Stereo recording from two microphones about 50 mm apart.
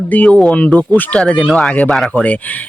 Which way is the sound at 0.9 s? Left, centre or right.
Left.